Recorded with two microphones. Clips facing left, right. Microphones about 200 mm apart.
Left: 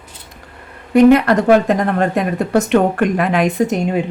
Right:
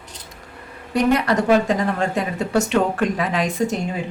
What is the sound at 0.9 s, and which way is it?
A woman's voice, 60° left (ahead or behind).